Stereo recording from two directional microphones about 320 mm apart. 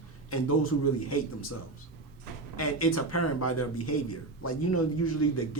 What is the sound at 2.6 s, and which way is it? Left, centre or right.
Mantra, left.